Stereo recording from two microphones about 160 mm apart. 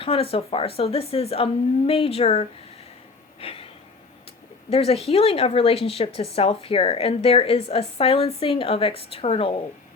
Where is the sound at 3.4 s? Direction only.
35° left (ahead or behind).